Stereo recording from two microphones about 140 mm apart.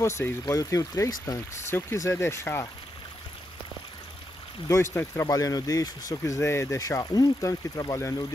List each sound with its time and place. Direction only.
0.0 s speech: 20° left (ahead or behind)
4.9 s speech: 20° left (ahead or behind)